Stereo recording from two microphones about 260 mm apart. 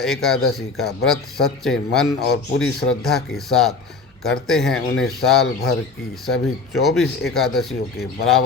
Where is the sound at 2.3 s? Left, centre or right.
Left.